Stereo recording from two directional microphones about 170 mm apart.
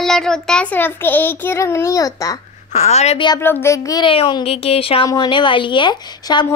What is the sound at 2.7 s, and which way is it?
Speech, 40° left (ahead or behind).